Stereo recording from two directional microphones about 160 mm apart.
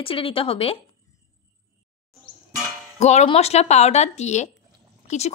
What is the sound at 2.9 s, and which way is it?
A woman's voice, 45° left (ahead or behind).